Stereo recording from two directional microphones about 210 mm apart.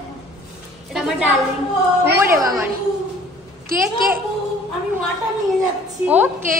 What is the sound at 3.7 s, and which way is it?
Speech, 45° right (ahead or behind).